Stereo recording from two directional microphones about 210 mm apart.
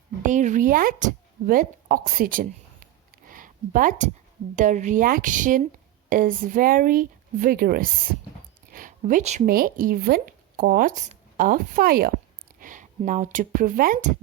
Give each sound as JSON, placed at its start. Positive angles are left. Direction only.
{"t": 0.2, "sound": "a woman's voice", "side_deg": -35}